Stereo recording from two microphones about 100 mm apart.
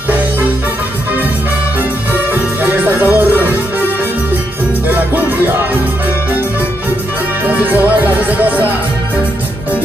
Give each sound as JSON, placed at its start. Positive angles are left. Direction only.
{"t": 2.6, "sound": "music", "side_deg": -20}
{"t": 4.8, "sound": "music", "side_deg": -20}
{"t": 7.4, "sound": "music", "side_deg": -15}